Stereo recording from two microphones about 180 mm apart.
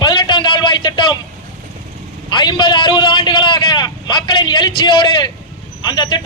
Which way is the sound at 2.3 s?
25° left (ahead or behind).